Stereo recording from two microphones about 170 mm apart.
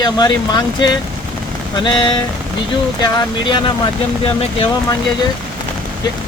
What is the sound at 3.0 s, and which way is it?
Speech, 25° left (ahead or behind).